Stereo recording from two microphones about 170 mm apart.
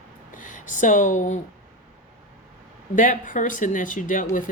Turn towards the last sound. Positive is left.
turn(degrees=50)  # may be behind; listen again after turning